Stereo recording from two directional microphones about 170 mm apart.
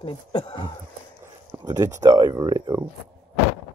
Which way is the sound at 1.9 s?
20° right (ahead or behind).